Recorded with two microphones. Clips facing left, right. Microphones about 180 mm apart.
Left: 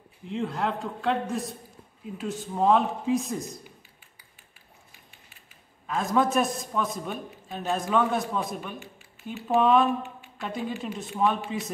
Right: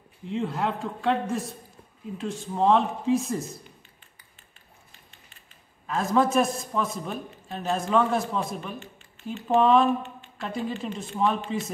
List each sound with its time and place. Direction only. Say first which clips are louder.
0.3 s a man's voice: right 1 dB; centre (ahead or behind)
2.1 s a man's voice: right 1 dB; 5° left (ahead or behind)
4.9 s a sound: even; 10° left (ahead or behind)
5.9 s a man's voice: right 1 dB; centre (ahead or behind)